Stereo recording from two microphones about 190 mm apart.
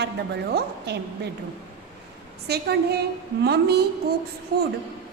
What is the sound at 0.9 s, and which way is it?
Speech, 60° right (ahead or behind).